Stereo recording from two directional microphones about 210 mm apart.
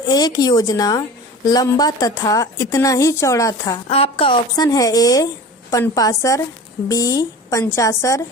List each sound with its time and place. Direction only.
0.1 s a woman's voice: 20° left (ahead or behind)
3.8 s a woman's voice: 30° left (ahead or behind)